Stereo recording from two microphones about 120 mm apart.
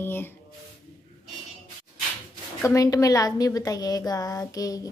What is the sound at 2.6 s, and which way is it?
A woman's voice, 25° left (ahead or behind).